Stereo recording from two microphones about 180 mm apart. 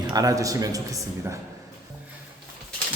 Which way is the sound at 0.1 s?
20° right (ahead or behind).